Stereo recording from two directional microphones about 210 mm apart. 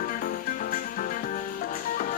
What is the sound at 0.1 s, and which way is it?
Music, 40° left (ahead or behind).